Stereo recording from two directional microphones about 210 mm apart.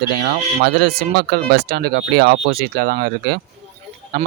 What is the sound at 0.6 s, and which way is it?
Speech, 50° right (ahead or behind).